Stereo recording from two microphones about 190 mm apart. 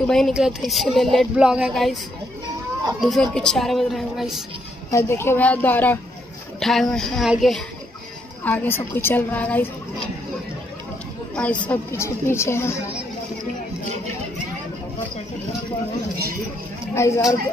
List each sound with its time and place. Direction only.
0.0 s speech: 5° left (ahead or behind)
3.0 s speech: centre (ahead or behind)
4.9 s a woman's voice: 15° left (ahead or behind)
8.5 s a woman's voice: 10° left (ahead or behind)
11.6 s a woman's voice: 10° left (ahead or behind)
16.9 s a woman's voice: 15° left (ahead or behind)